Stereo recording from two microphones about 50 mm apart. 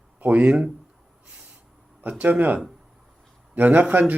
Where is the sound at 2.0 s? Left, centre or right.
Right.